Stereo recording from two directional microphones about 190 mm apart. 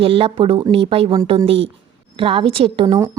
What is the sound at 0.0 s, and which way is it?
A woman's voice, 30° right (ahead or behind).